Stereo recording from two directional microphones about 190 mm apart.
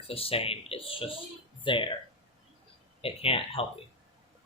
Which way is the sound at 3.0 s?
30° left (ahead or behind).